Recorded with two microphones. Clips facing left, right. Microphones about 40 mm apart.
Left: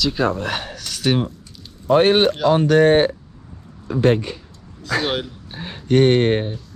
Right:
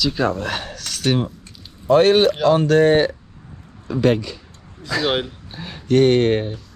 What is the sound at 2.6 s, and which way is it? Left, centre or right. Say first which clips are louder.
Speech: left 3 dB; left.